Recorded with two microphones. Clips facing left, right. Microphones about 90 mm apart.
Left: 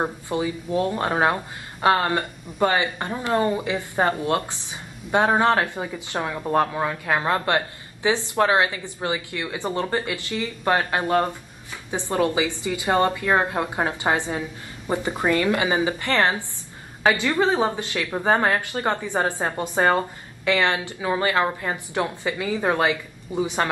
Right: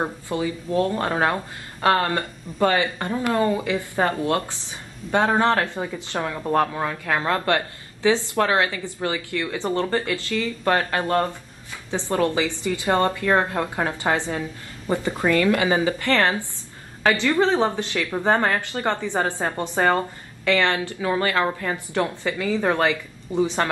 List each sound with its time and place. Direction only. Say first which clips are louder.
0.0 s a woman's voice: even; 15° left (ahead or behind)